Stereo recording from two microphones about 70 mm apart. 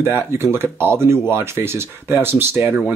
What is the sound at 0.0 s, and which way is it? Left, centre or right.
Speech, right.